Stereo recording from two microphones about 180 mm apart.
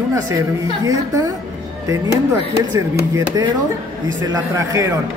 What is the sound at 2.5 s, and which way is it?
A man's voice, 20° right (ahead or behind).